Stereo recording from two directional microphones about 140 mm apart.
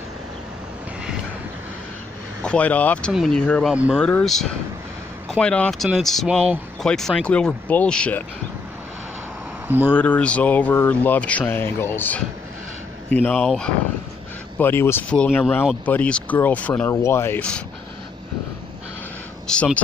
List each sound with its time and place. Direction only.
2.4 s speech: 10° left (ahead or behind)
9.7 s speech: 15° right (ahead or behind)
9.9 s speech: 10° left (ahead or behind)
14.6 s speech: 15° left (ahead or behind)
19.4 s speech: 10° left (ahead or behind)